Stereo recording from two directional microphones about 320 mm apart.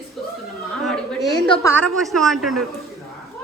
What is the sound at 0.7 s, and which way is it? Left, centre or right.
A woman's voice, centre.